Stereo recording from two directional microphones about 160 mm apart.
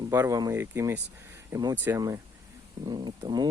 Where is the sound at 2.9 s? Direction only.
30° right (ahead or behind).